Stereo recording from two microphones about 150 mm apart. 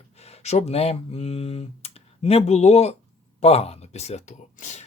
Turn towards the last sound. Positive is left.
turn(degrees=50)  # may be behind; listen again after turning